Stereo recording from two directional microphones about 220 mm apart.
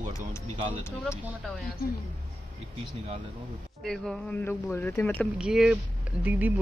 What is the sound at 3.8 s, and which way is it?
Speech, centre (ahead or behind).